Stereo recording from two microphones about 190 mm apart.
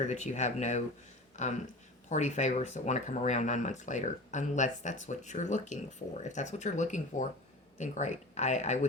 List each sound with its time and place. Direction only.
0.1 s speech: 40° left (ahead or behind)